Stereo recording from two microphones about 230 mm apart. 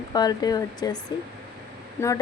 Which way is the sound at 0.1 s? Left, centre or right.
Centre.